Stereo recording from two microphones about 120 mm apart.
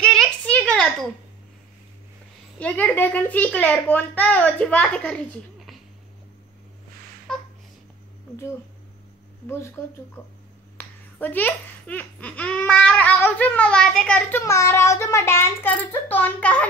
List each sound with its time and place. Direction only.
0.0 s a sound: 5° left (ahead or behind)
2.6 s speech: 10° left (ahead or behind)
9.5 s a child's voice: 20° left (ahead or behind)
14.4 s a child's voice: 25° left (ahead or behind)